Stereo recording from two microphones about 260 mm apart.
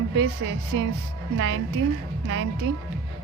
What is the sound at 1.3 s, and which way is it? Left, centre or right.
Speech, right.